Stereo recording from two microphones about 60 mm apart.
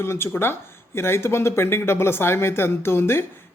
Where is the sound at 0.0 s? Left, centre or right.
Left.